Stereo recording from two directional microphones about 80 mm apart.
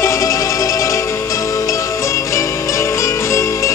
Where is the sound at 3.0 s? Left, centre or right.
Left.